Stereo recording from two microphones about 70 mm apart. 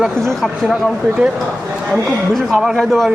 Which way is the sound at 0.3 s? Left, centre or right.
Centre.